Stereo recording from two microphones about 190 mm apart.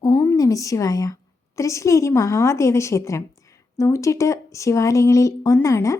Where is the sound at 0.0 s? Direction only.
15° left (ahead or behind).